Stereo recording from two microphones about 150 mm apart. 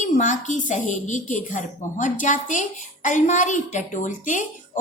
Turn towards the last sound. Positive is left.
turn(degrees=60)  # may be behind; listen again after turning